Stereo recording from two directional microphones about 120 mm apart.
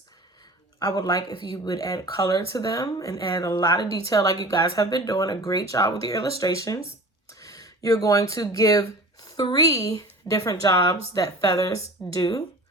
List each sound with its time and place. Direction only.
0.8 s speech: 35° left (ahead or behind)